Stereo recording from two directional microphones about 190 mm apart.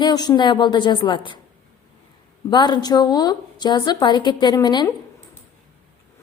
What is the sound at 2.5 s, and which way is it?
A woman's voice, 20° left (ahead or behind).